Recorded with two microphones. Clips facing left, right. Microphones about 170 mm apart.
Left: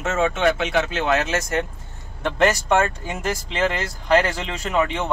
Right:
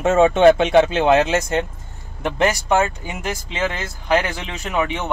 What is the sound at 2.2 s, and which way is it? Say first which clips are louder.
Speech: even; 10° right (ahead or behind).